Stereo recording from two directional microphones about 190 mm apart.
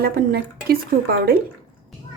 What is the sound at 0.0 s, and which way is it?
Speech, 55° right (ahead or behind).